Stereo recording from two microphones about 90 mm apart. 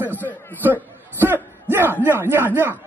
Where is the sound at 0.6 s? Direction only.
20° right (ahead or behind).